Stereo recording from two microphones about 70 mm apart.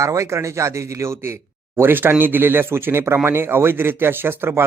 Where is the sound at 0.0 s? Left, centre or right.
Right.